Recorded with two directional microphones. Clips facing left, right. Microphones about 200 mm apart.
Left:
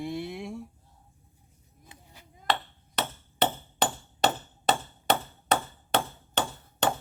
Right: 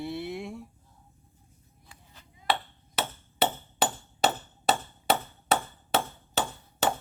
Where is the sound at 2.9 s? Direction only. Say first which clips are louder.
Even; 5° right (ahead or behind).